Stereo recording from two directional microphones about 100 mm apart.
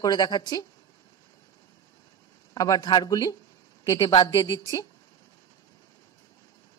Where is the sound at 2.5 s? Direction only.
40° left (ahead or behind).